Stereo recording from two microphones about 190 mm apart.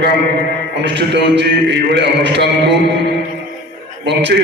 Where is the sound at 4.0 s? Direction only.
65° right (ahead or behind).